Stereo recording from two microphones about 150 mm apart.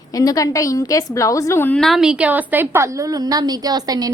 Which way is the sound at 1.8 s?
Centre (ahead or behind).